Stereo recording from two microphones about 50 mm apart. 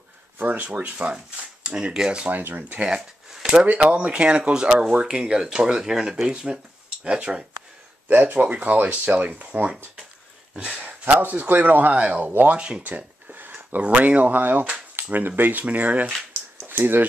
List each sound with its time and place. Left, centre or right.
0.4 s speech: right; by 2.3 s centre
2.3 s speech: right
3.8 s speech: centre
8.1 s speech: right
16.6 s speech: right